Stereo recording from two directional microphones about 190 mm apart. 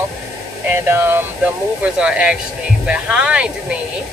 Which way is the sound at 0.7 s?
10° right (ahead or behind).